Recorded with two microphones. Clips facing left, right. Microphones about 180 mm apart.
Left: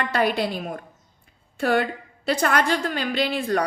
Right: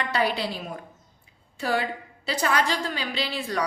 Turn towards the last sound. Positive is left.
turn(degrees=50)  # may be behind; listen again after turning